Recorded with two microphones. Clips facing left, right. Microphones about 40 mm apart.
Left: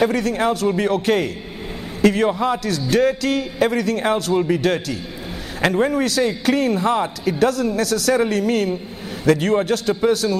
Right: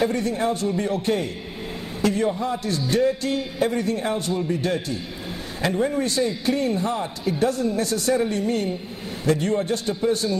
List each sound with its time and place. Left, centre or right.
0.0 s a man's voice: left